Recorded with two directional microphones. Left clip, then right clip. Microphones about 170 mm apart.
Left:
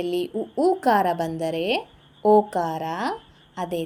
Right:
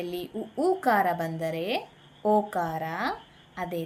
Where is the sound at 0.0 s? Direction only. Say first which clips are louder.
Left 8 dB; 30° left (ahead or behind).